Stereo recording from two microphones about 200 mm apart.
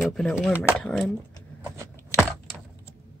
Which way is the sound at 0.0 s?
Centre (ahead or behind).